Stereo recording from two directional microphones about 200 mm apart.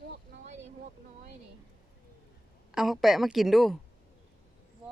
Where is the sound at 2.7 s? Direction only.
Centre (ahead or behind).